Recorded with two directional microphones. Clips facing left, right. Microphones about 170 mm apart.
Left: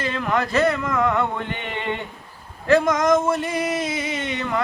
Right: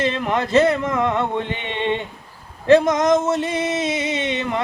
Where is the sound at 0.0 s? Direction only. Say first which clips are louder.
Right 2 dB; 25° right (ahead or behind).